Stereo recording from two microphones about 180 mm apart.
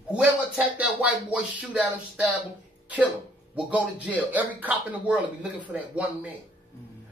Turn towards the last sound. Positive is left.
turn(degrees=-10)  # may be behind; listen again after turning